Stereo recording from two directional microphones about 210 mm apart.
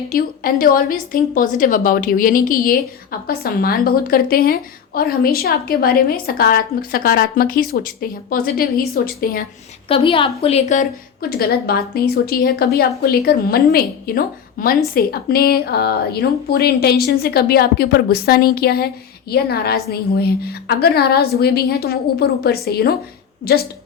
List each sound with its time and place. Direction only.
0.1 s a woman's voice: 45° left (ahead or behind)
9.9 s a woman's voice: 25° left (ahead or behind); by 23.6 s 50° left (ahead or behind)